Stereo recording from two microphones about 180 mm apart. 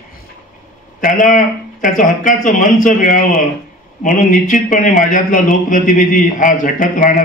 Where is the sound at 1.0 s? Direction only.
45° left (ahead or behind).